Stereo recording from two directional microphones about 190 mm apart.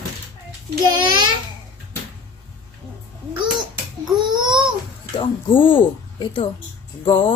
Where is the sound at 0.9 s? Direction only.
25° right (ahead or behind).